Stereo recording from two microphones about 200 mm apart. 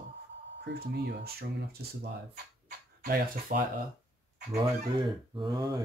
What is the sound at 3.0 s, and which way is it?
Speech, 45° right (ahead or behind).